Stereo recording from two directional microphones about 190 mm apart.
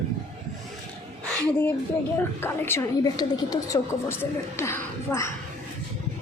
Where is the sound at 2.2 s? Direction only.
10° left (ahead or behind).